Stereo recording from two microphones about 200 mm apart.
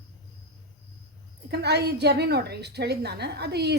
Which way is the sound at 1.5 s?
55° right (ahead or behind).